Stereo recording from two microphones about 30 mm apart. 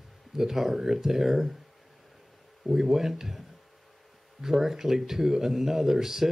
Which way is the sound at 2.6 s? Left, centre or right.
Centre.